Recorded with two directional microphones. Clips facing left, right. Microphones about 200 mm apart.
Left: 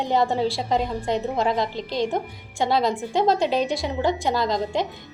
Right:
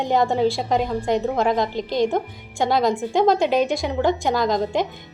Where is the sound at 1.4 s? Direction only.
50° right (ahead or behind).